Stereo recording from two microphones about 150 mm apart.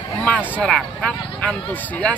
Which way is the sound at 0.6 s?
5° left (ahead or behind).